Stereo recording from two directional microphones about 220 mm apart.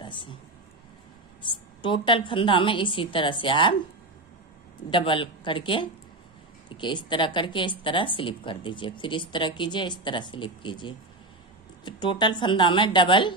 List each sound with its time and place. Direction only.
0.0 s a sound: 20° left (ahead or behind)
1.8 s speech: 20° left (ahead or behind)
4.9 s speech: 25° left (ahead or behind)